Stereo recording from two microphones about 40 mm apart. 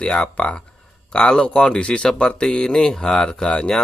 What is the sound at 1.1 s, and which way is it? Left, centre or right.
Speech, left.